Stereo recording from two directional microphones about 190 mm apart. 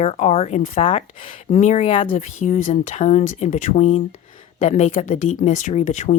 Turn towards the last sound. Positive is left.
turn(degrees=40)  # may be behind; listen again after turning